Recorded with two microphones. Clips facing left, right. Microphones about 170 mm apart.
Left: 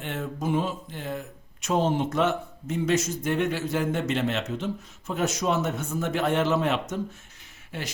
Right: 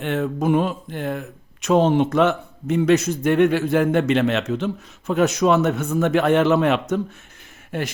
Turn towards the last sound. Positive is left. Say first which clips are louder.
# right 9 dB
turn(degrees=-55)  # may be behind; listen again after turning